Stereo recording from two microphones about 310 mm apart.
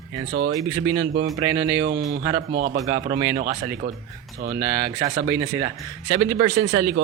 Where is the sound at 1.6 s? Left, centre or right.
Right.